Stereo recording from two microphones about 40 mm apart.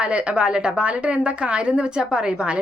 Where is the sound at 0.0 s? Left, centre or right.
Right.